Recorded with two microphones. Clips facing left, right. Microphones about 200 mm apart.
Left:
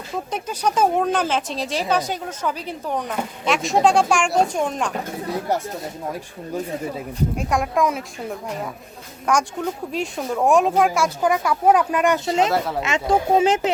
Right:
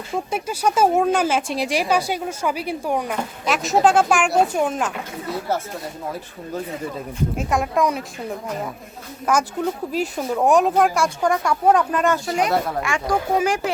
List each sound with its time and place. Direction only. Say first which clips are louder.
0.3 s a woman's voice: right 1 dB; 10° right (ahead or behind)
7.3 s speech: right 1 dB; centre (ahead or behind)
9.3 s speech: right 1 dB; centre (ahead or behind); by 12.5 s 25° left (ahead or behind)
12.5 s speech: even; 5° left (ahead or behind)
12.8 s speech: left 2 dB; 20° left (ahead or behind)